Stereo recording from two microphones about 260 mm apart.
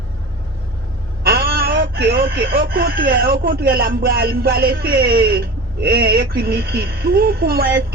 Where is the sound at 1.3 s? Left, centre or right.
Right.